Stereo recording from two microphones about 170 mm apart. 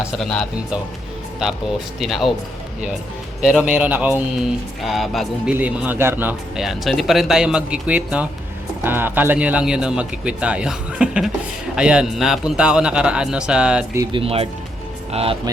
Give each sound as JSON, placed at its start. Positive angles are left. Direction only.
{"t": 0.2, "sound": "a man's voice", "side_deg": 5}
{"t": 2.0, "sound": "a man's voice", "side_deg": 0}
{"t": 3.4, "sound": "speech", "side_deg": -5}
{"t": 4.8, "sound": "speech", "side_deg": 0}
{"t": 6.6, "sound": "a man's voice", "side_deg": 0}
{"t": 14.1, "sound": "speech", "side_deg": -35}